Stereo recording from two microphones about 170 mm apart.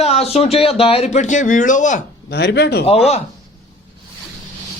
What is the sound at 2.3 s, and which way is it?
Speech, 80° left.